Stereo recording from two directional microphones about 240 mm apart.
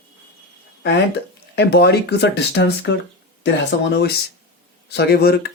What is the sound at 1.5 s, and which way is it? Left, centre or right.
Speech, left.